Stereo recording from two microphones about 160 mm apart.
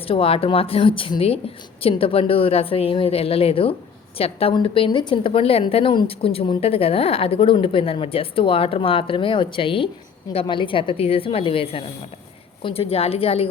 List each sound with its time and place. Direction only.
0.1 s a woman's voice: 35° left (ahead or behind)